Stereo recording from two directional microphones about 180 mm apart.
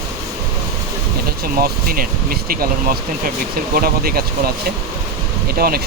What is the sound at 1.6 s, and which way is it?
Speech, 55° right (ahead or behind).